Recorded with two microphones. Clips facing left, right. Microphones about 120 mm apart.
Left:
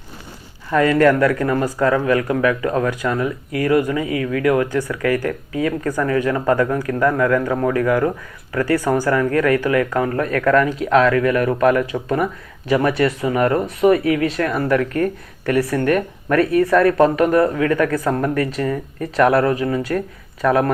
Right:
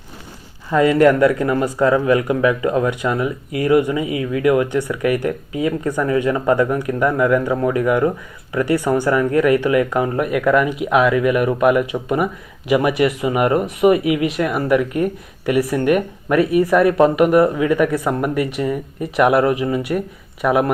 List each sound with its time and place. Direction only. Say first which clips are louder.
0.7 s speech: right 1 dB; 20° right (ahead or behind)